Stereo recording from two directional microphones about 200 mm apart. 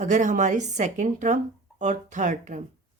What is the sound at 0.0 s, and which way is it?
Speech, 40° right (ahead or behind).